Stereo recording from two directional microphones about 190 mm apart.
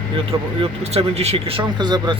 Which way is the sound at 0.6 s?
35° right (ahead or behind).